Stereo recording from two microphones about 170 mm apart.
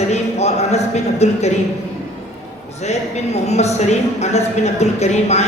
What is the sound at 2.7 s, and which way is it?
Speech, 40° left (ahead or behind).